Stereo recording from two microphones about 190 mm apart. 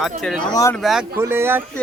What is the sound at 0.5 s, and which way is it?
Speech, 15° left (ahead or behind).